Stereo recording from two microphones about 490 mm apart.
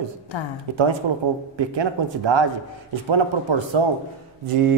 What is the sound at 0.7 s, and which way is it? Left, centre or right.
A man's voice, right.